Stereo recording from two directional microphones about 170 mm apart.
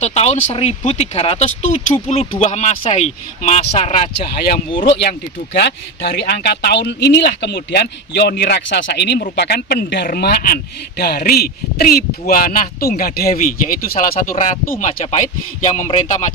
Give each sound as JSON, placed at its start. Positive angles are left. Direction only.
{"t": 0.0, "sound": "speech", "side_deg": 40}
{"t": 5.5, "sound": "a man's voice", "side_deg": 80}
{"t": 14.3, "sound": "speech", "side_deg": 45}